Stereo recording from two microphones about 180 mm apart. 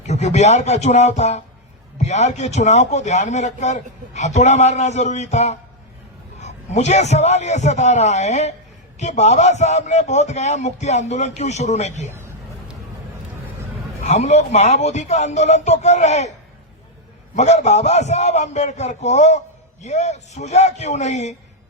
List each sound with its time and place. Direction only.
0.1 s a man's voice: 40° left (ahead or behind)
14.0 s a man's voice: 40° left (ahead or behind)
17.3 s a man's voice: 40° left (ahead or behind)